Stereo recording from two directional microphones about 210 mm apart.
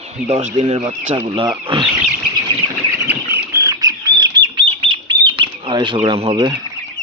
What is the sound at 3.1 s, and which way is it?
Bird, 10° right (ahead or behind).